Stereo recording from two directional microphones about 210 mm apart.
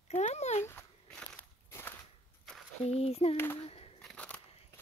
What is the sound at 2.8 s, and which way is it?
Speech, 30° left (ahead or behind).